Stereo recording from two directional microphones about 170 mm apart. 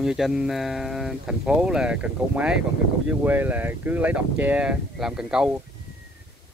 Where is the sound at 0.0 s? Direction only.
5° right (ahead or behind).